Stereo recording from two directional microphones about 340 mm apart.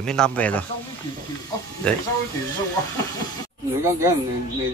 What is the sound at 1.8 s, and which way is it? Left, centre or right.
Speech, centre.